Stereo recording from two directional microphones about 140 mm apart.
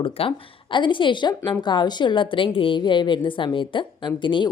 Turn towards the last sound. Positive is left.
turn(degrees=35)  # may be behind; listen again after turning